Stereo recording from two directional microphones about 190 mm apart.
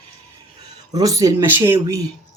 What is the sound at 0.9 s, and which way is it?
Speech, 20° right (ahead or behind).